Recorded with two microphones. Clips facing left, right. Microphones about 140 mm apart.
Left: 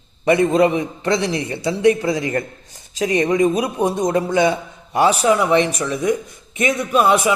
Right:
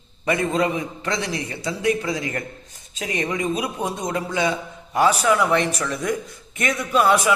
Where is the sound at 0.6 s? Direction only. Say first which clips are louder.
Left 6 dB; 30° left (ahead or behind).